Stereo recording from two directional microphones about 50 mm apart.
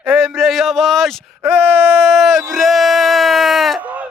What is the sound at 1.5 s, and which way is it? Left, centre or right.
Wail, right.